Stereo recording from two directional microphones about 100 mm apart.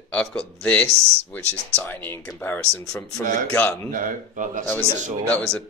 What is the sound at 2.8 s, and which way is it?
Speech, 5° left (ahead or behind).